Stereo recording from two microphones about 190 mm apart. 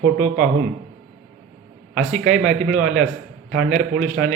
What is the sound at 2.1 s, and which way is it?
Speech, 40° right (ahead or behind).